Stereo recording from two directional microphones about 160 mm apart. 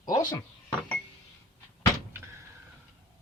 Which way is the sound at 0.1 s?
25° left (ahead or behind).